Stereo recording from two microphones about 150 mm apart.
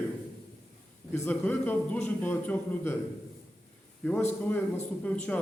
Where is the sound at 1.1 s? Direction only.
10° left (ahead or behind).